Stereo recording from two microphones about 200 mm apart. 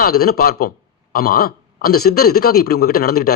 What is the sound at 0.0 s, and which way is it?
Speech, 50° left (ahead or behind).